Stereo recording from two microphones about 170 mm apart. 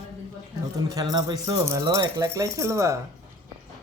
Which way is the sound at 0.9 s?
25° right (ahead or behind).